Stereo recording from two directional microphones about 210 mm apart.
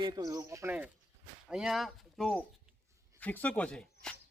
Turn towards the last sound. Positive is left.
turn(degrees=5)  # may be behind; listen again after turning